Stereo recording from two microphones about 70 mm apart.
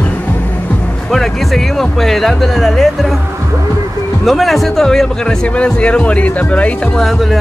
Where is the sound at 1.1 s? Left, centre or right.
Centre.